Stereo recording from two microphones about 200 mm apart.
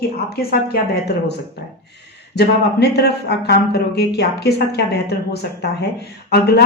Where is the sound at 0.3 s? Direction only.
50° left (ahead or behind).